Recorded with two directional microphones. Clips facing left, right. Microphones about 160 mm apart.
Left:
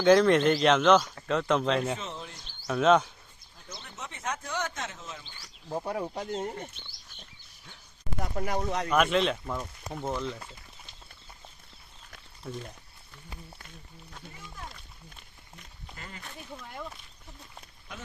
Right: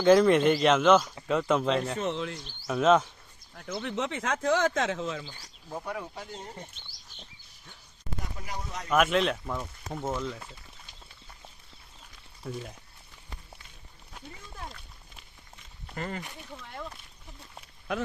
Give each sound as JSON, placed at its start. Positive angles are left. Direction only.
{"t": 0.0, "sound": "speech", "side_deg": 0}
{"t": 2.0, "sound": "speech", "side_deg": -80}
{"t": 2.6, "sound": "speech", "side_deg": 0}
{"t": 3.8, "sound": "speech", "side_deg": -90}
{"t": 5.6, "sound": "speech", "side_deg": 25}
{"t": 8.4, "sound": "speech", "side_deg": 60}
{"t": 8.9, "sound": "speech", "side_deg": 0}
{"t": 12.4, "sound": "speech", "side_deg": -5}
{"t": 16.0, "sound": "speech", "side_deg": -55}
{"t": 16.5, "sound": "speech", "side_deg": 5}